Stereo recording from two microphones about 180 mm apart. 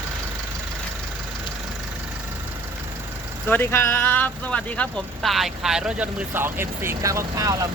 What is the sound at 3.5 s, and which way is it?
Speech, 10° left (ahead or behind).